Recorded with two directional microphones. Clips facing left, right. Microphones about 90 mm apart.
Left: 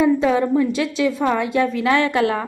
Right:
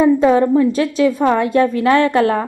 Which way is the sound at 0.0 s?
35° right (ahead or behind).